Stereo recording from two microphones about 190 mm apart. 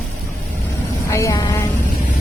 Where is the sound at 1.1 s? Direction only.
15° left (ahead or behind).